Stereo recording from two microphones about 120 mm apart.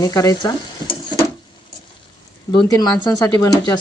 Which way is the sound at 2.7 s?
30° left (ahead or behind).